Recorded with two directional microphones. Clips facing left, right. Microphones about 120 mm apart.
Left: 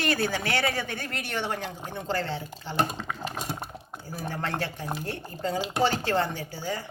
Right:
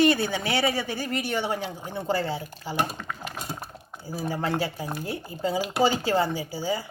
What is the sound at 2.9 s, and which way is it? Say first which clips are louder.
Dishes: left 2 dB; 25° left (ahead or behind).